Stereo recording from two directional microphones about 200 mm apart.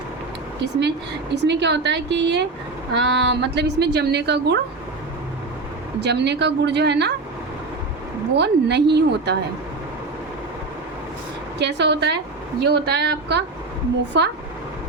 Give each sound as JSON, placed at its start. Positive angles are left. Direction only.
{"t": 0.6, "sound": "a woman's voice", "side_deg": -60}
{"t": 6.0, "sound": "a woman's voice", "side_deg": -55}
{"t": 8.4, "sound": "a woman's voice", "side_deg": -55}
{"t": 11.6, "sound": "a woman's voice", "side_deg": -60}